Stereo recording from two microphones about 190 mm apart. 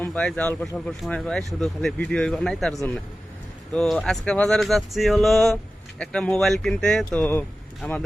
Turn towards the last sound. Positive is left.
turn(degrees=10)  # may be behind; listen again after turning